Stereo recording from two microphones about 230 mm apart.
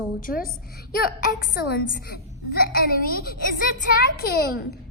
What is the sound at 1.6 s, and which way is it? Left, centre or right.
A woman's voice, left.